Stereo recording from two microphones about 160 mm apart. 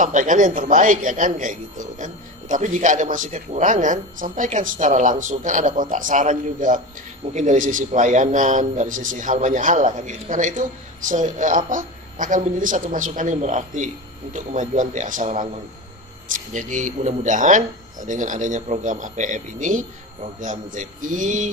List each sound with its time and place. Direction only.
0.0 s a man's voice: 50° right (ahead or behind)
16.5 s a man's voice: 50° right (ahead or behind)